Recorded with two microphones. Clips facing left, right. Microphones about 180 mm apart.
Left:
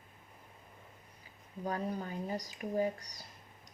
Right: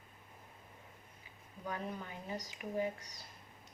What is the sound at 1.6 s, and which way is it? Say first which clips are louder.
Speech: left 5 dB; 35° left (ahead or behind).